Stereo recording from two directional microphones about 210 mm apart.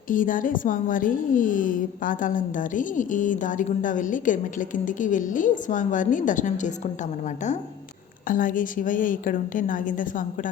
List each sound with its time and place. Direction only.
0.1 s a woman's voice: 40° left (ahead or behind)
8.3 s a woman's voice: 40° left (ahead or behind)